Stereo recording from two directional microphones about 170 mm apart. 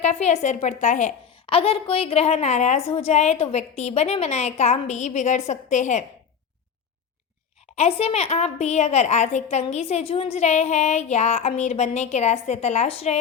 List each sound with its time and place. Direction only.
0.0 s a woman's voice: 40° left (ahead or behind)
1.5 s a woman's voice: 35° left (ahead or behind)
7.8 s a woman's voice: 35° left (ahead or behind)